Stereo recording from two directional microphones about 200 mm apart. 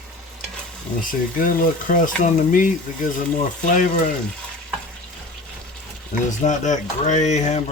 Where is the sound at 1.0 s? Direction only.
45° left (ahead or behind).